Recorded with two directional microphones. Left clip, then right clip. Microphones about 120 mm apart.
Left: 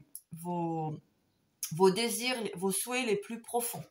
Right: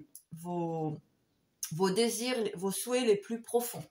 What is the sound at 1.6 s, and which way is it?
Speech, 40° left (ahead or behind).